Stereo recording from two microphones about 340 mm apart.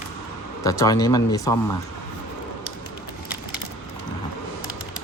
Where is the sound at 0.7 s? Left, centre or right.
Centre.